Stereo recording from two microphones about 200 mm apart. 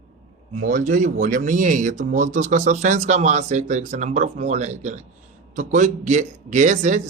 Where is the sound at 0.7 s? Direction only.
40° right (ahead or behind).